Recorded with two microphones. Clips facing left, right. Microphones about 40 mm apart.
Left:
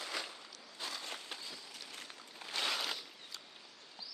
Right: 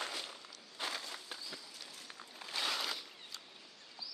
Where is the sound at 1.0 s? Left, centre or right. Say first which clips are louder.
Left 2 dB; left.